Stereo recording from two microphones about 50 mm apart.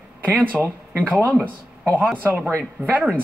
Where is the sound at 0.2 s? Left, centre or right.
Right.